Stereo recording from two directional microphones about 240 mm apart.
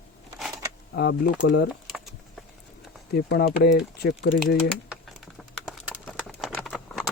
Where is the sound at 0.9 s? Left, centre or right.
Left.